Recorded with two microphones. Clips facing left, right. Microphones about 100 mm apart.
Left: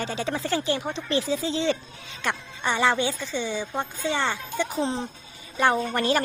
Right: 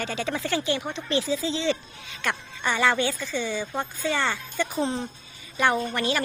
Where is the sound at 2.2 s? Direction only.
25° left (ahead or behind).